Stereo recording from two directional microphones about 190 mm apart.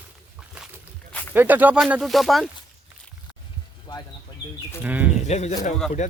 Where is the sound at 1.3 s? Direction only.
10° right (ahead or behind).